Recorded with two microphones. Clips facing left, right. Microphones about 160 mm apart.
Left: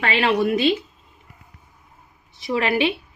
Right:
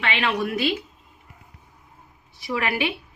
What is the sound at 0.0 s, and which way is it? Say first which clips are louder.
Speech: left 5 dB; 35° left (ahead or behind).